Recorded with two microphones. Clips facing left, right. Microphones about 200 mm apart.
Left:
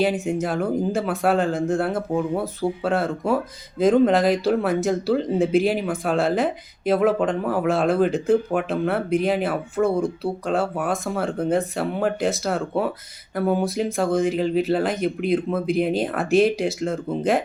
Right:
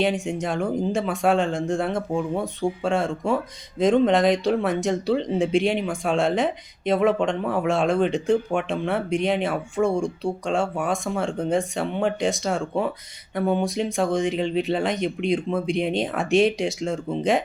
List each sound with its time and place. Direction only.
0.0 s speech: centre (ahead or behind)